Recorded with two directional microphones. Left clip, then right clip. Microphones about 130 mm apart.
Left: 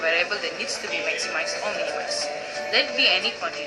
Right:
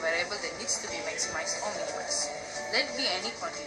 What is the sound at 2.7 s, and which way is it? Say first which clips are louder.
Speech: left 9 dB; 20° left (ahead or behind).